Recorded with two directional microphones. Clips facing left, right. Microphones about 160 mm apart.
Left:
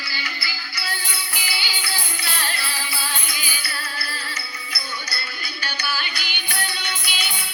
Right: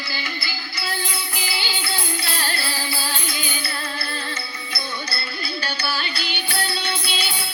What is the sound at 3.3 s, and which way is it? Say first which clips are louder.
Music: right 4 dB; 25° right (ahead or behind).